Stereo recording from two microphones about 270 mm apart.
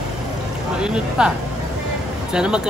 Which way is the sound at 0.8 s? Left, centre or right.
Centre.